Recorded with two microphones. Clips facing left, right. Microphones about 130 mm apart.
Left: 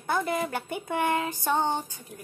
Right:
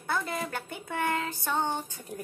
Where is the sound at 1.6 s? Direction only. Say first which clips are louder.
Left 2 dB; 25° left (ahead or behind).